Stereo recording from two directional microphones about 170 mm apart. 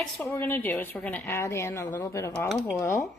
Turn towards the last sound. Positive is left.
turn(degrees=15)  # may be behind; listen again after turning